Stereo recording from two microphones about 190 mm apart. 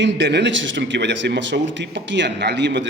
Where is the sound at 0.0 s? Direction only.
65° right (ahead or behind).